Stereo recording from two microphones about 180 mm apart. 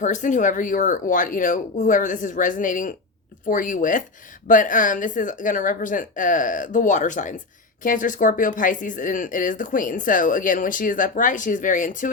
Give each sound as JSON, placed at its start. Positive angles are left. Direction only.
{"t": 0.0, "sound": "speech", "side_deg": 45}